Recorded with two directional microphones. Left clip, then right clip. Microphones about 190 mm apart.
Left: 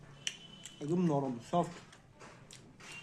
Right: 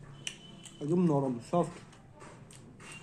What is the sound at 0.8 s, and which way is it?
Speech, 10° left (ahead or behind).